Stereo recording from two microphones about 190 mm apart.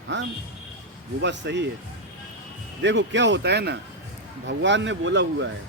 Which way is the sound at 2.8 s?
70° right (ahead or behind).